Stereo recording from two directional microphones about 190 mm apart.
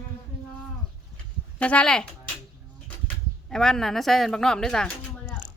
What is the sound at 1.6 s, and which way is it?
Speech, 5° left (ahead or behind).